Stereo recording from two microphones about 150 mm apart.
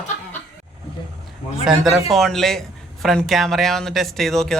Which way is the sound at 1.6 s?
Centre (ahead or behind).